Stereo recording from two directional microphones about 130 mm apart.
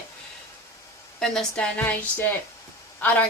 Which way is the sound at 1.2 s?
5° left (ahead or behind).